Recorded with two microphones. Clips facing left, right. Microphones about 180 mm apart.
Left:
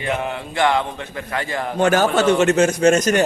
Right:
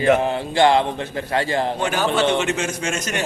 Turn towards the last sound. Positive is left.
turn(degrees=40)  # may be behind; listen again after turning